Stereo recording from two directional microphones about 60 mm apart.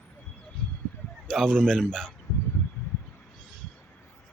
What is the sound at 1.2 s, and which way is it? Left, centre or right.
Speech, centre.